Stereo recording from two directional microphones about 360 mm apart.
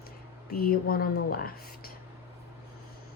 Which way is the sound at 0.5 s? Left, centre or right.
Left.